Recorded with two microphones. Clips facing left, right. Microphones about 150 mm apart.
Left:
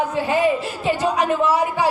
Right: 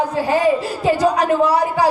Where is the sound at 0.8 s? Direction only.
40° right (ahead or behind).